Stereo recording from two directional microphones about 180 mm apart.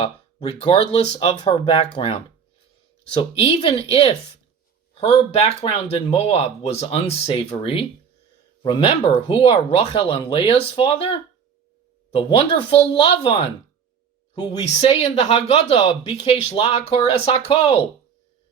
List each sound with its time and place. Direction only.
0.0 s speech: 30° left (ahead or behind)